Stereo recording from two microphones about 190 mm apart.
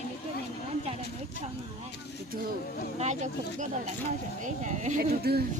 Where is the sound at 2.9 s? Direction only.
35° right (ahead or behind).